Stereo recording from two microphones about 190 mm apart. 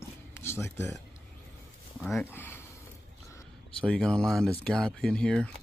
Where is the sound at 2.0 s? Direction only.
Centre (ahead or behind).